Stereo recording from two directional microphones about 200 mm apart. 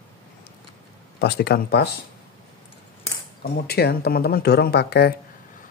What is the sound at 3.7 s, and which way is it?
Speech, 55° left (ahead or behind).